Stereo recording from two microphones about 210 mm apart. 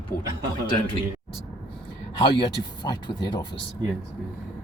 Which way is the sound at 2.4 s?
20° left (ahead or behind).